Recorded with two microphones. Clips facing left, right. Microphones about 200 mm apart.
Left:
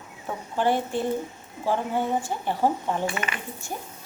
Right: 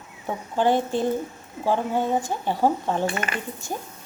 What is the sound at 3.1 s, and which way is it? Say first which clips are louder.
Speech: right 2 dB; 45° right (ahead or behind).